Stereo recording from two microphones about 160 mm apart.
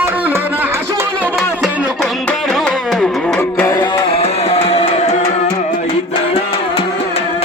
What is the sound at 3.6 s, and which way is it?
Music, 25° left (ahead or behind).